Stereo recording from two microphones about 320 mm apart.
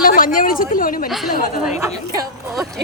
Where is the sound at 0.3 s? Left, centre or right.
Left.